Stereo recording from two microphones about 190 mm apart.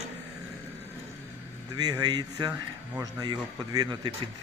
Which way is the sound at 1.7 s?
20° right (ahead or behind).